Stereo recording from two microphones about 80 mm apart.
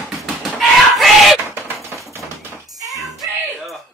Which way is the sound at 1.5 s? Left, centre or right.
Right.